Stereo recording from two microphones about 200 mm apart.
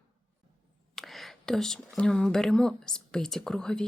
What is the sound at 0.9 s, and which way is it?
Speech, centre (ahead or behind).